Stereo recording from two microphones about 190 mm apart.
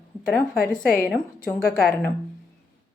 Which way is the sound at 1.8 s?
5° left (ahead or behind).